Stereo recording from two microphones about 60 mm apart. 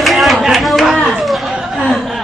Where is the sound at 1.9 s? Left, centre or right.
Centre.